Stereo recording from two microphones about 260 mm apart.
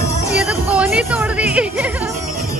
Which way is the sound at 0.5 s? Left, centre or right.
Centre.